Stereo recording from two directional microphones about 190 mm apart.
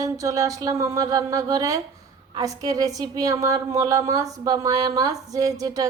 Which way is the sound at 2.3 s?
20° right (ahead or behind).